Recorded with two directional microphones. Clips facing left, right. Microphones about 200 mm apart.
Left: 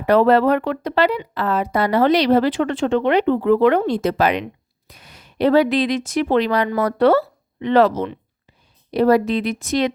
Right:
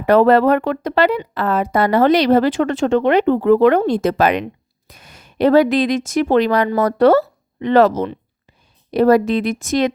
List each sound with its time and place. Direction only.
0.0 s speech: 50° right (ahead or behind)